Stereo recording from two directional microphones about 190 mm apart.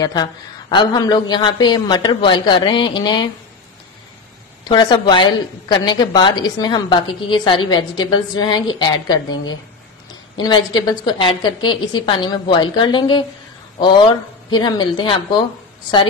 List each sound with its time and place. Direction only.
0.0 s a woman's voice: 20° left (ahead or behind)
4.6 s a woman's voice: 25° left (ahead or behind)